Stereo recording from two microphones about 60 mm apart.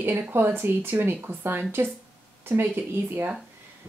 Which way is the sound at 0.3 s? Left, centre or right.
Right.